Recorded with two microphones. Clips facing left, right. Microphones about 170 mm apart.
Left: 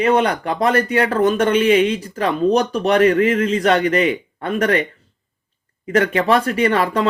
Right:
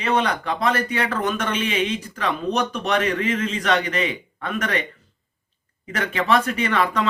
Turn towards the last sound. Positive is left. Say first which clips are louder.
# left 5 dB
turn(degrees=35)  # may be behind; listen again after turning